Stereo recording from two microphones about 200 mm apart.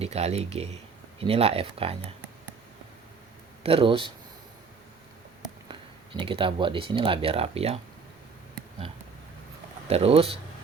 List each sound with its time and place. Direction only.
0.0 s speech: 30° right (ahead or behind)
3.6 s speech: 25° right (ahead or behind)
6.1 s speech: 25° right (ahead or behind)
9.9 s speech: 30° right (ahead or behind)